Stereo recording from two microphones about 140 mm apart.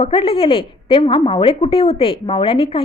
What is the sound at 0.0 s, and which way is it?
A woman's voice, 40° left (ahead or behind).